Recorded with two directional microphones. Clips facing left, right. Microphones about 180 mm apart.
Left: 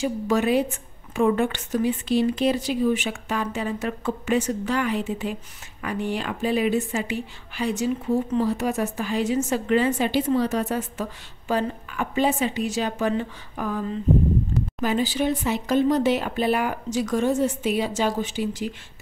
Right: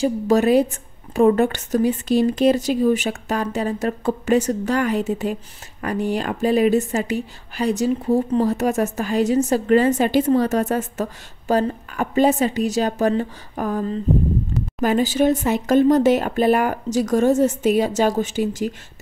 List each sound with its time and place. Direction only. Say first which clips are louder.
0.0 s a woman's voice: right 5 dB; 40° right (ahead or behind)